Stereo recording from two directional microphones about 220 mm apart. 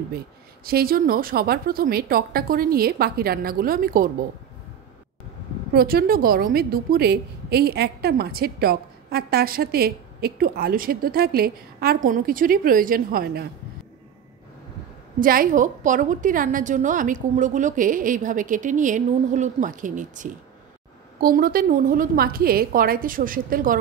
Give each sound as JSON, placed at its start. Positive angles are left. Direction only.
{"t": 0.7, "sound": "a woman's voice", "side_deg": -45}
{"t": 5.7, "sound": "a woman's voice", "side_deg": -45}
{"t": 15.1, "sound": "a woman's voice", "side_deg": -40}